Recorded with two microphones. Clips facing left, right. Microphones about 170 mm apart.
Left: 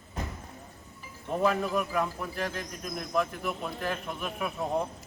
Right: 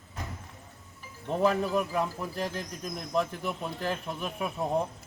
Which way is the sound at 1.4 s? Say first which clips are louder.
Right 1 dB; 30° right (ahead or behind).